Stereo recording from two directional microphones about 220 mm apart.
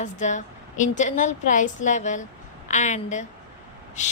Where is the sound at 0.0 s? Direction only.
35° left (ahead or behind).